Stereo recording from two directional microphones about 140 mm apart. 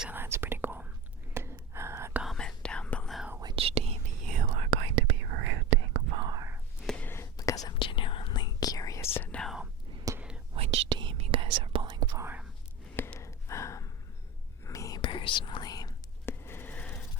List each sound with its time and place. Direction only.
0.0 s whispering: 15° right (ahead or behind)
2.2 s whispering: 5° left (ahead or behind)
3.2 s whispering: 10° right (ahead or behind)
3.4 s whispering: 40° right (ahead or behind)
6.2 s whispering: 25° right (ahead or behind)
6.8 s whispering: 15° left (ahead or behind)
9.1 s whispering: 10° left (ahead or behind)
10.2 s whispering: 5° right (ahead or behind)
10.5 s whispering: 45° right (ahead or behind)
12.2 s whispering: 10° right (ahead or behind)
13.0 s gasp: 15° left (ahead or behind)
14.7 s whispering: 25° left (ahead or behind)
15.0 s whispering: 35° left (ahead or behind); by 17.0 s 10° left (ahead or behind)